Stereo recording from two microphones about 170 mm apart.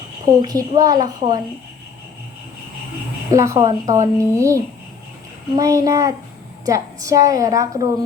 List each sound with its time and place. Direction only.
0.4 s a woman's voice: 20° right (ahead or behind)
3.2 s a woman's voice: 20° right (ahead or behind)